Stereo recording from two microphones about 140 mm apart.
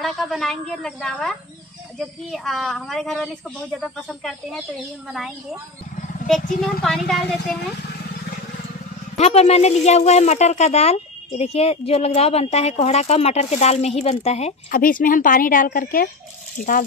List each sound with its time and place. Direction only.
0.0 s speech: centre (ahead or behind)
9.2 s speech: 50° left (ahead or behind)
14.7 s a woman's voice: 80° left